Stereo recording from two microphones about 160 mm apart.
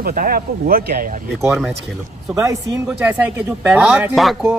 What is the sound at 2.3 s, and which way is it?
Speech, 20° right (ahead or behind).